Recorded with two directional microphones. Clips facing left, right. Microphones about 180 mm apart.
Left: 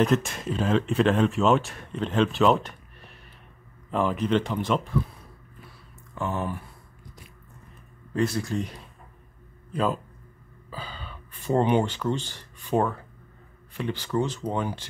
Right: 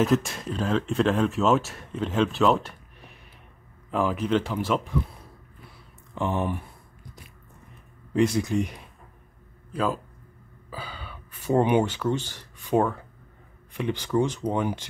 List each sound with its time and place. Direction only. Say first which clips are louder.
0.0 s speech: even; centre (ahead or behind)
3.9 s speech: even; 5° right (ahead or behind)
6.1 s speech: right 3 dB; 15° right (ahead or behind)
8.1 s speech: right 3 dB; 15° right (ahead or behind)
9.7 s a man's voice: left 1 dB; 5° right (ahead or behind)
10.7 s gasp: even; 10° right (ahead or behind)
13.7 s speech: right 2 dB; 15° right (ahead or behind)